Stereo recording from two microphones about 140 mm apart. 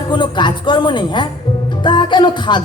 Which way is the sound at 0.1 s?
35° left (ahead or behind).